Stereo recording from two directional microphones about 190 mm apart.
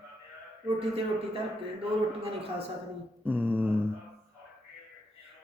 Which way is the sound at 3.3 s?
10° right (ahead or behind).